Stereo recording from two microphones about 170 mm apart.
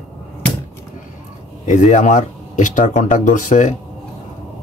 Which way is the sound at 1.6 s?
45° left (ahead or behind).